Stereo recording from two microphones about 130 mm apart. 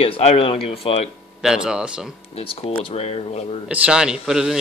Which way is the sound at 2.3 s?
45° left (ahead or behind).